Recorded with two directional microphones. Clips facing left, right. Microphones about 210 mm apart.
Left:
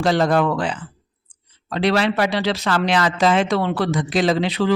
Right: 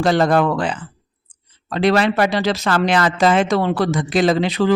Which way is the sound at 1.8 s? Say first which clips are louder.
Right 3 dB; 45° right (ahead or behind).